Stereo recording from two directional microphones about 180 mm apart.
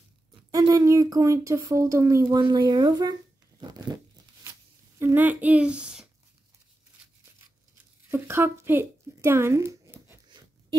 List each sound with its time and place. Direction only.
0.5 s speech: 20° right (ahead or behind)
4.9 s speech: 10° right (ahead or behind)
8.1 s a sound: 15° right (ahead or behind)